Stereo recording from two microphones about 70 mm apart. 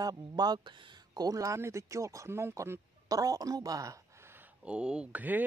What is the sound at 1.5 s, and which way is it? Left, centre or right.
Speech, right.